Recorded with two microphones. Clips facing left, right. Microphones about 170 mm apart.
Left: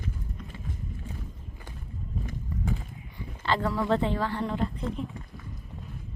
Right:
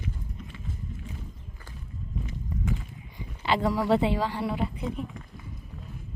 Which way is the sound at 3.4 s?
15° right (ahead or behind).